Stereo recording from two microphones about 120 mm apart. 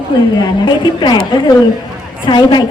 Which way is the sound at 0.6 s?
40° left (ahead or behind).